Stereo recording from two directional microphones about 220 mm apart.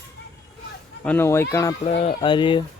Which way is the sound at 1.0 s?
10° left (ahead or behind).